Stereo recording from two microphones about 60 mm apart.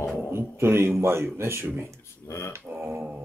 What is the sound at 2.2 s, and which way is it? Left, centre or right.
Speech, left.